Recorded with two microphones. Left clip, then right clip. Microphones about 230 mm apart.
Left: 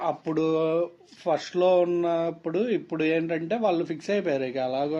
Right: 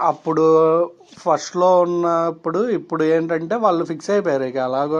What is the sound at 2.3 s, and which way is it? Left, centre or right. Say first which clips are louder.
Speech: right 7 dB; centre.